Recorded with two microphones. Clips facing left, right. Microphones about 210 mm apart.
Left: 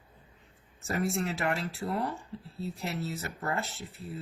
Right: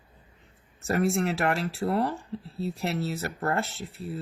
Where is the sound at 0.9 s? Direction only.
75° right (ahead or behind).